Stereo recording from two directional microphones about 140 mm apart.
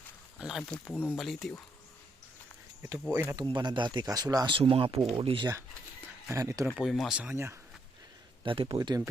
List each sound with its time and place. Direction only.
0.3 s a sound: 5° right (ahead or behind)
0.9 s speech: 15° left (ahead or behind)
1.1 s speech: centre (ahead or behind)
3.1 s speech: 15° right (ahead or behind)
3.3 s speech: 30° right (ahead or behind)
6.3 s speech: 20° right (ahead or behind)
6.7 s speech: centre (ahead or behind); by 7.6 s 20° right (ahead or behind)
8.4 s speech: 40° right (ahead or behind)